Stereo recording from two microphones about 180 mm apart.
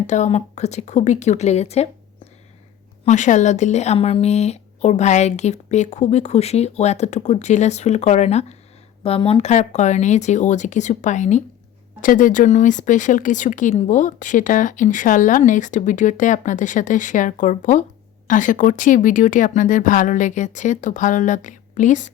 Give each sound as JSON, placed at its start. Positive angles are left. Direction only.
{"t": 0.1, "sound": "speech", "side_deg": 40}
{"t": 3.0, "sound": "speech", "side_deg": 40}